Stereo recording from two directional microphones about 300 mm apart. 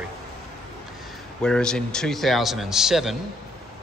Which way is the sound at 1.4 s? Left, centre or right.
Centre.